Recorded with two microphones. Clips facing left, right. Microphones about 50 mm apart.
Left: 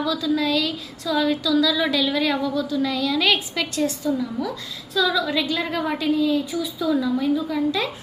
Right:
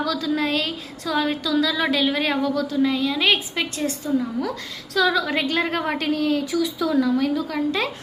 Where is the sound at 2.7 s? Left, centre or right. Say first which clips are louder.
Right 1 dB; right.